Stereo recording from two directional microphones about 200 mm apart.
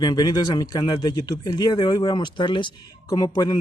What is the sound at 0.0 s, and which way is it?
Speech, 20° left (ahead or behind).